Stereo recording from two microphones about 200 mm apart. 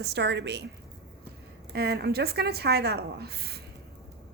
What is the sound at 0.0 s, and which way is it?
Speech, 60° right (ahead or behind).